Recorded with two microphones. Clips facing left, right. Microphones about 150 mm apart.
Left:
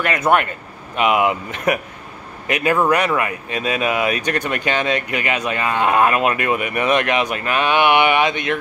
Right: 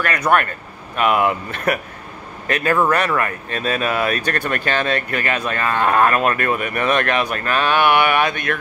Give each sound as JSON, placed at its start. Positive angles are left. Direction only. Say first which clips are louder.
{"t": 0.0, "sound": "speech", "louder": "left 1 dB", "side_deg": 20}